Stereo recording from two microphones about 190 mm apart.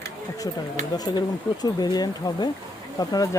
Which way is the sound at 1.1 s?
20° left (ahead or behind).